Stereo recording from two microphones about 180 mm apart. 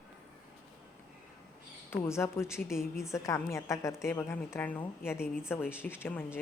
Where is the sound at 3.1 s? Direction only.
15° left (ahead or behind).